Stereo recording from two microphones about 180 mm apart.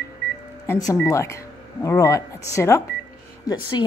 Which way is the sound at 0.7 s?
20° left (ahead or behind).